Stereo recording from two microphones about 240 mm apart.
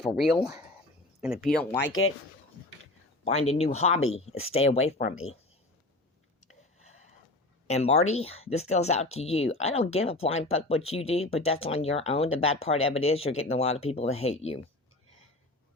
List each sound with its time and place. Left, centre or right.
0.0 s speech: centre
1.8 s speech: left
3.2 s speech: left
6.7 s a sound: left
7.7 s speech: left